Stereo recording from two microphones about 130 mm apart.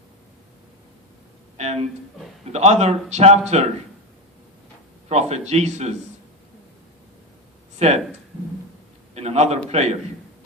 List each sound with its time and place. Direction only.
1.5 s a man's voice: 55° right (ahead or behind)
5.0 s a man's voice: 55° right (ahead or behind)
7.8 s speech: 55° right (ahead or behind)
9.1 s a man's voice: 55° right (ahead or behind)